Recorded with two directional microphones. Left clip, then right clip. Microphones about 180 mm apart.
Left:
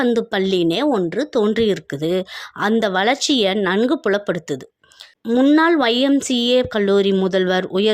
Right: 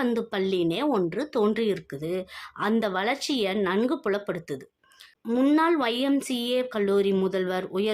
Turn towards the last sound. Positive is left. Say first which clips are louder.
# left 9 dB
turn(degrees=40)  # may be behind; listen again after turning